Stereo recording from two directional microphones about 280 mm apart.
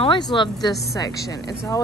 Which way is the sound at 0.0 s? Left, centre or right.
Centre.